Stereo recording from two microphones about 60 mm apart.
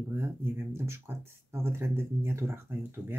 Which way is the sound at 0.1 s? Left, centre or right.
Right.